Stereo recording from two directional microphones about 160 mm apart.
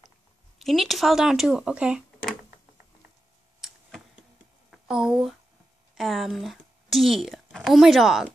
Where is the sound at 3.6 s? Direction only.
Centre (ahead or behind).